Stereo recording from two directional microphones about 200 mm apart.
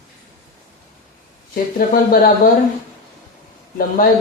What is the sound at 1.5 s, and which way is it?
Speech, 45° left (ahead or behind).